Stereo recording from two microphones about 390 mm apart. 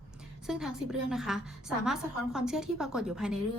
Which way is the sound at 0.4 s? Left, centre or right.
Centre.